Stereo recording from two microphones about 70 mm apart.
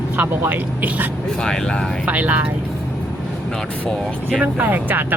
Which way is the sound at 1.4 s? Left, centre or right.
Centre.